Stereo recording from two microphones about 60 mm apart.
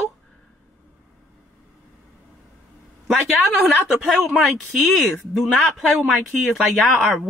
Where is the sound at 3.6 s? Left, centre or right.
Centre.